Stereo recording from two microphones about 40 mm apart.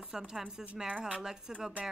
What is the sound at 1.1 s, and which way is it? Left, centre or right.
Speech, centre.